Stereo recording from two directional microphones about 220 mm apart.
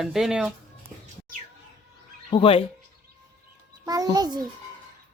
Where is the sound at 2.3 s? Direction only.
25° left (ahead or behind).